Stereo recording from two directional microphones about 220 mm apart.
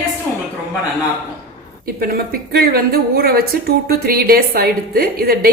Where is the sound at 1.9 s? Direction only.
45° right (ahead or behind).